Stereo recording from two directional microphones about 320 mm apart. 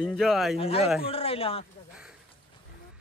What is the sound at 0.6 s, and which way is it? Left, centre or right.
Speech, centre.